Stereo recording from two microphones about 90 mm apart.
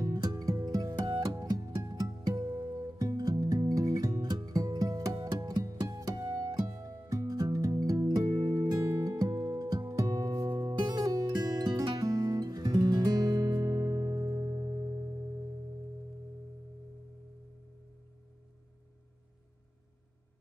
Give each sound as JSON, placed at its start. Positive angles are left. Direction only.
{"t": 0.0, "sound": "music", "side_deg": -45}